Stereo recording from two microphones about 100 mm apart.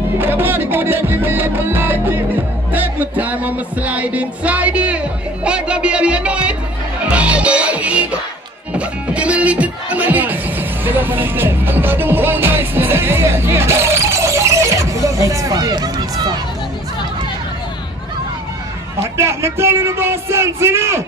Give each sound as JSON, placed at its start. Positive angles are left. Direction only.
{"t": 0.2, "sound": "music", "side_deg": -20}
{"t": 8.7, "sound": "speech", "side_deg": -10}
{"t": 19.1, "sound": "music", "side_deg": -25}